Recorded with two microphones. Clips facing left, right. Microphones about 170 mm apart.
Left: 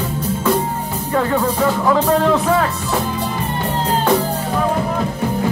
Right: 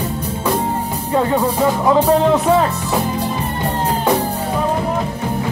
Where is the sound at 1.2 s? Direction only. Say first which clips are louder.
Right 1 dB; 20° right (ahead or behind).